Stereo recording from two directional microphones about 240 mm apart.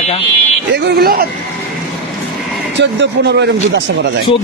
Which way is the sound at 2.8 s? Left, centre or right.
Right.